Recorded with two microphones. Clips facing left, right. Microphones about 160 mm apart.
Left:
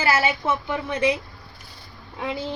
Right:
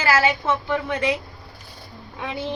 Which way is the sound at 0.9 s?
20° left (ahead or behind).